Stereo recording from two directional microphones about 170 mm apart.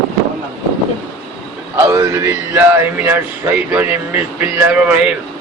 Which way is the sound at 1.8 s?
20° right (ahead or behind).